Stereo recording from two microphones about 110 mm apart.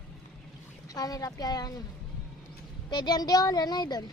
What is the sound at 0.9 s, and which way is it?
Speech, 35° left (ahead or behind).